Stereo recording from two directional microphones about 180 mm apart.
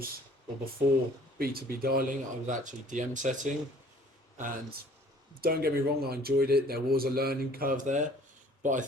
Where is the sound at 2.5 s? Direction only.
45° right (ahead or behind).